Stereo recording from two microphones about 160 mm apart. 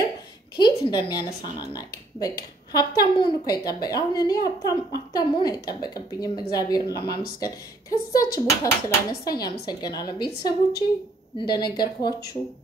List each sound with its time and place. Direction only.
0.6 s a woman's voice: 25° left (ahead or behind)